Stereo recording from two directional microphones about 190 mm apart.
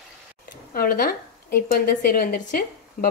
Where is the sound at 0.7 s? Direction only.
50° left (ahead or behind).